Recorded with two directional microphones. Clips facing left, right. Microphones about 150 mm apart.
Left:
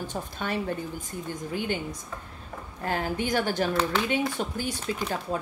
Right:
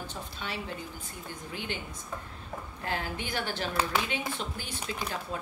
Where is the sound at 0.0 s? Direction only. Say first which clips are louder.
Left 6 dB; 50° left (ahead or behind).